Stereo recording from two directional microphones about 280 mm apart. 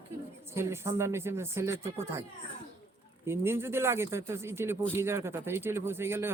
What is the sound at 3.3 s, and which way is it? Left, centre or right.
Speech, centre.